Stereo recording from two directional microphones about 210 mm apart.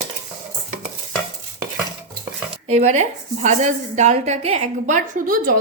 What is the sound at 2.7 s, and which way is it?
A woman's voice, 30° right (ahead or behind).